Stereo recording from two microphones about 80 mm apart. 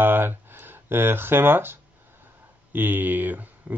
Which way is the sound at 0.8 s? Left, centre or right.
Right.